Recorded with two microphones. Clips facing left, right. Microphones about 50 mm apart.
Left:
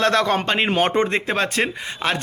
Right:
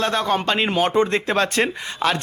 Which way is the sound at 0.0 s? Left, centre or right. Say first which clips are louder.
Left 3 dB; left.